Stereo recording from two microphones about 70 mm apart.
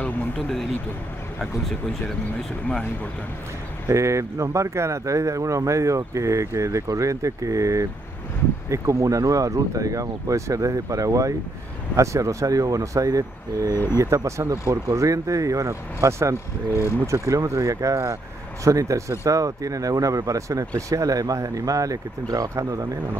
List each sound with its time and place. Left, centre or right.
3.9 s speech: right